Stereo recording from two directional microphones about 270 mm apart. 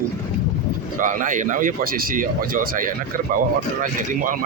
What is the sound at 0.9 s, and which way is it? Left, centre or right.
A man's voice, right.